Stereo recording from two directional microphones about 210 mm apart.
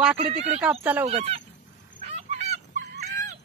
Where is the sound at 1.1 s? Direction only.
30° right (ahead or behind).